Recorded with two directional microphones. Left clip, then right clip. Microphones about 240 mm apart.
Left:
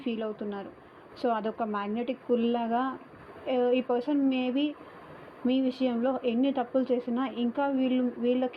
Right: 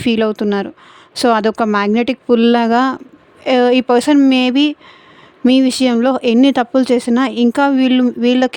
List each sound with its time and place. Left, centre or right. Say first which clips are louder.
0.0 s speech: right 18 dB; right